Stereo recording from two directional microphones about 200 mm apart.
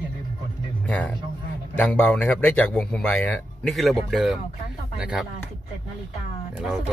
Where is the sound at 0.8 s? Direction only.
5° left (ahead or behind).